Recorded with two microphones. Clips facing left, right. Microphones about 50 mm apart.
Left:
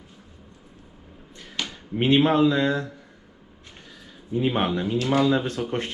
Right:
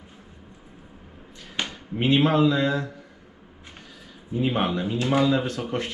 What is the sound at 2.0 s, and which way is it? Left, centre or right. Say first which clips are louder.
Speech: left 1 dB; left.